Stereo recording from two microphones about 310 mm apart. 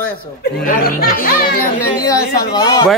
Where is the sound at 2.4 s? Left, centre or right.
Centre.